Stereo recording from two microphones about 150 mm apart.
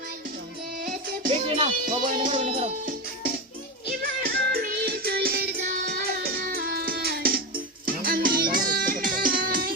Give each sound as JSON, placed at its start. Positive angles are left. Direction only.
{"t": 1.5, "sound": "music", "side_deg": -40}
{"t": 1.9, "sound": "music", "side_deg": -60}
{"t": 2.4, "sound": "music", "side_deg": -40}
{"t": 4.0, "sound": "music", "side_deg": -90}